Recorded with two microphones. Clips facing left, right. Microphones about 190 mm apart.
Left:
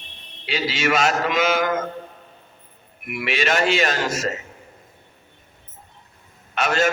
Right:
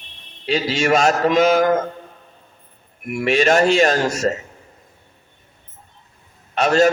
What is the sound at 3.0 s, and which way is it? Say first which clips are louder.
A man's voice: right 7 dB; 40° right (ahead or behind).